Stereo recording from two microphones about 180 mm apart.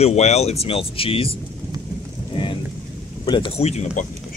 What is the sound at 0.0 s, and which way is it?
Speech, 35° left (ahead or behind).